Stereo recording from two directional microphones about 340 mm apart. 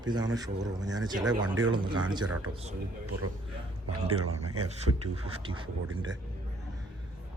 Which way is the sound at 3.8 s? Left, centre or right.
Right.